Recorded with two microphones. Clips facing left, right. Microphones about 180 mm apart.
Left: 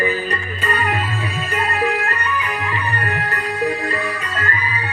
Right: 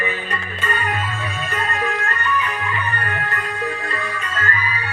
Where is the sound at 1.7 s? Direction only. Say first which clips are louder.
Left 5 dB; 35° left (ahead or behind).